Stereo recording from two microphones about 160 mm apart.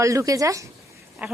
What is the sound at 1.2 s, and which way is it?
Speech, 10° right (ahead or behind).